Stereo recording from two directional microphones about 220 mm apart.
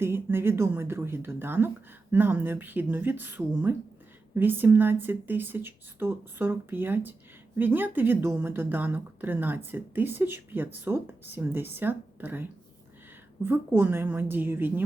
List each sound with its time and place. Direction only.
0.0 s speech: 10° right (ahead or behind)